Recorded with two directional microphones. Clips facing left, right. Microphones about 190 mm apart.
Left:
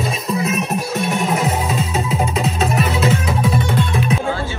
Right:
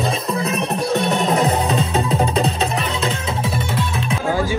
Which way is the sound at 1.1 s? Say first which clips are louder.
Left 1 dB; 35° right (ahead or behind).